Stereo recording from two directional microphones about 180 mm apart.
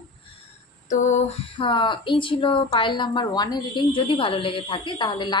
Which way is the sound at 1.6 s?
25° left (ahead or behind).